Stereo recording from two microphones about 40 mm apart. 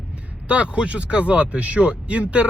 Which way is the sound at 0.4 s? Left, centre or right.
Right.